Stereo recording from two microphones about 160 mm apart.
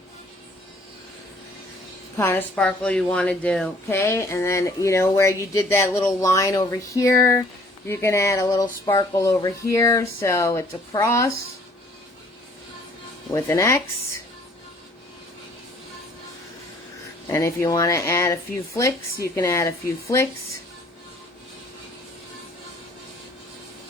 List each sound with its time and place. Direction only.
2.1 s a woman's voice: 15° left (ahead or behind)
13.3 s speech: 15° left (ahead or behind)
17.2 s speech: 20° left (ahead or behind)